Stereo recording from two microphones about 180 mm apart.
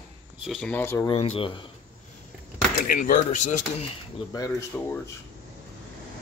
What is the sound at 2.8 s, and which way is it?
Speech, 50° left (ahead or behind).